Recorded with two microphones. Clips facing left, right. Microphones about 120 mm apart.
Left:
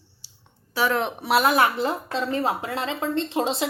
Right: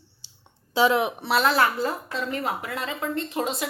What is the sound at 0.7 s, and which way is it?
Speech, 15° right (ahead or behind).